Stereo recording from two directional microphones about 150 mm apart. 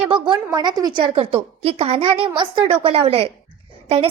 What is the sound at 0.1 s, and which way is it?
A woman's voice, 30° right (ahead or behind).